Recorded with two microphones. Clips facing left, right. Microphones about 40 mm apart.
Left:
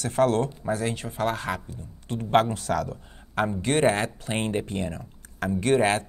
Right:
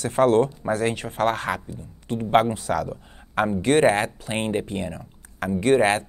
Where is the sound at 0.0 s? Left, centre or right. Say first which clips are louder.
Right 4 dB; right.